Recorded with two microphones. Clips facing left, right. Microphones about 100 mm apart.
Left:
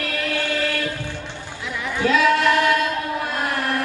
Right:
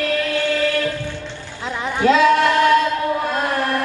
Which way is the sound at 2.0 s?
25° right (ahead or behind).